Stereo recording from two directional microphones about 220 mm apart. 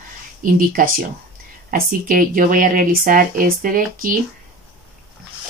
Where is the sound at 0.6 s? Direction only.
40° right (ahead or behind).